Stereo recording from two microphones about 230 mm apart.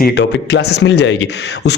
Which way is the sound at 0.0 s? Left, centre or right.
Left.